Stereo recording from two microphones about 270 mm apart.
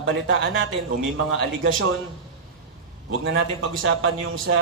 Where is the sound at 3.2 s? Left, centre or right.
Right.